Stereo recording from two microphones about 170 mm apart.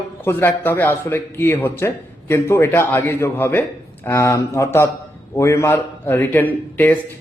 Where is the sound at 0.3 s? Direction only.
15° left (ahead or behind).